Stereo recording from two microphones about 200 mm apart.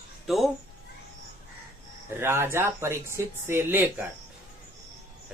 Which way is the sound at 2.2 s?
10° right (ahead or behind).